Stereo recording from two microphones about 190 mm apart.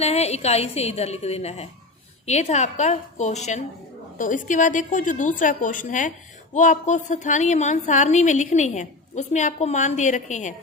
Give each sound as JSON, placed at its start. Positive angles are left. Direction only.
{"t": 0.0, "sound": "a woman's voice", "side_deg": 35}